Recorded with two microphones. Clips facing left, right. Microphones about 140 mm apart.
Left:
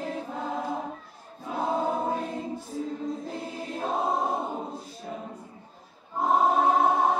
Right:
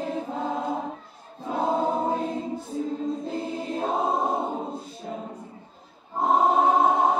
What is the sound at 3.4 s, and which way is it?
Choir, 25° right (ahead or behind).